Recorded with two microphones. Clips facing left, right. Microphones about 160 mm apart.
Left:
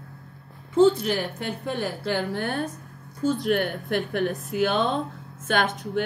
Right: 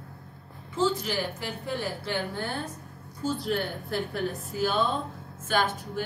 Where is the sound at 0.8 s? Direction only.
70° left (ahead or behind).